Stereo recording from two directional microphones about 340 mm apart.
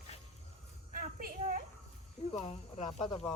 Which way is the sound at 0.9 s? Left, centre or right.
Right.